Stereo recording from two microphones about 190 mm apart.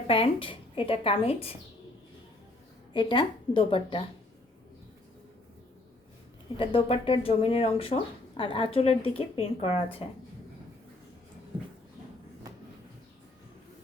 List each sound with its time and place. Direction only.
0.1 s a woman's voice: 30° left (ahead or behind)
2.9 s speech: 25° left (ahead or behind)
6.6 s a woman's voice: 30° left (ahead or behind)